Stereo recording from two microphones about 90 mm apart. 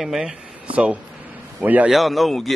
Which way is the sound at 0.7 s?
15° right (ahead or behind).